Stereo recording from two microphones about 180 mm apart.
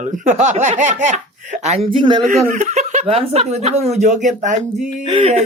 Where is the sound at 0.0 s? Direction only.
40° right (ahead or behind); by 2.5 s 25° right (ahead or behind).